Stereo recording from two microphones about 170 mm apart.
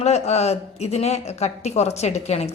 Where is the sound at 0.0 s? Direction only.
40° left (ahead or behind).